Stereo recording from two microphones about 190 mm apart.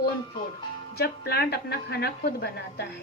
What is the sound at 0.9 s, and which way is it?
A woman's voice, 55° left (ahead or behind).